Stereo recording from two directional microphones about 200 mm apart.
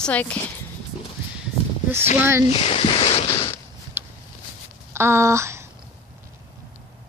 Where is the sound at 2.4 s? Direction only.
30° left (ahead or behind).